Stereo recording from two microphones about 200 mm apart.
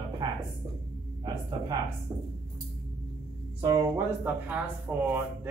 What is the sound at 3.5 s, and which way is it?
Speech, 15° right (ahead or behind).